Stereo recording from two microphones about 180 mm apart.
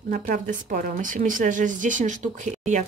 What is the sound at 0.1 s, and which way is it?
Speech, 50° right (ahead or behind).